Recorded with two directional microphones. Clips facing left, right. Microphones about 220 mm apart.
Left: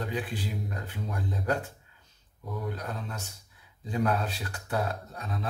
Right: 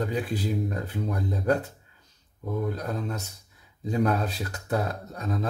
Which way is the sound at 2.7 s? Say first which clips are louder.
Right 6 dB; 40° right (ahead or behind).